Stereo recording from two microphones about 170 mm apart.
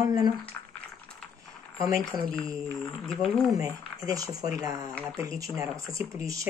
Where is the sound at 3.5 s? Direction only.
20° right (ahead or behind).